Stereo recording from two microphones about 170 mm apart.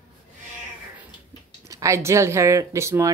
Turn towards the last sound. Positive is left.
turn(degrees=-15)  # may be behind; listen again after turning